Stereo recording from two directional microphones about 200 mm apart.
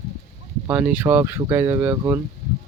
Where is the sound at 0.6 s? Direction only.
5° right (ahead or behind).